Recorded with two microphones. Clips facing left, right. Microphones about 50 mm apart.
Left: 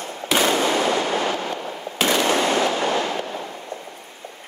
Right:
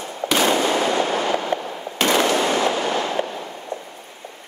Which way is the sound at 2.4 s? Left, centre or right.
Right.